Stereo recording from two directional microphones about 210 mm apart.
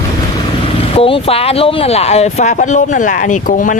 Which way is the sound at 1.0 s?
25° left (ahead or behind).